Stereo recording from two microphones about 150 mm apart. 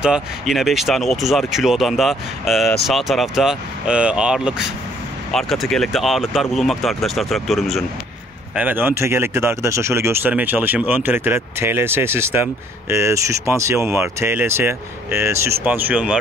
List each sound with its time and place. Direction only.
0.0 s speech: 5° right (ahead or behind)
8.5 s speech: 10° right (ahead or behind)